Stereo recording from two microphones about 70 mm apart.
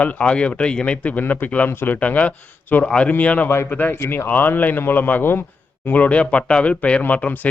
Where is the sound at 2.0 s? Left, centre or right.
Left.